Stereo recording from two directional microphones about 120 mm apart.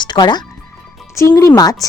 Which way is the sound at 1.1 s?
25° left (ahead or behind).